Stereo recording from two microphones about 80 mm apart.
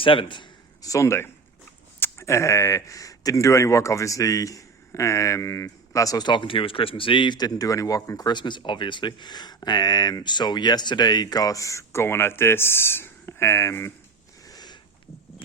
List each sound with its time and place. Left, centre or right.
0.0 s a man's voice: left
0.8 s speech: left
6.2 s speech: left
14.4 s a sound: left